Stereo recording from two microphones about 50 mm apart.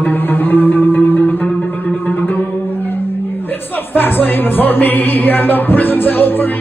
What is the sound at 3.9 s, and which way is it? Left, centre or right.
Music, left.